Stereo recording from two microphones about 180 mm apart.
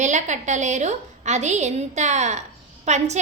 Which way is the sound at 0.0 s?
40° right (ahead or behind).